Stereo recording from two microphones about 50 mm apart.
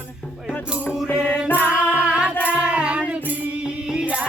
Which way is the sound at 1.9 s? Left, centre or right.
Right.